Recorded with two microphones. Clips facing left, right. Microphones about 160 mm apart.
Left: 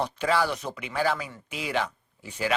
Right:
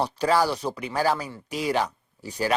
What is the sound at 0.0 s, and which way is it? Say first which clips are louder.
Speech: right 3 dB; 40° right (ahead or behind).